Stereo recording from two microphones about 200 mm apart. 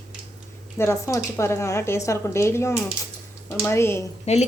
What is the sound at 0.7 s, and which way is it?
A woman's voice, 15° left (ahead or behind).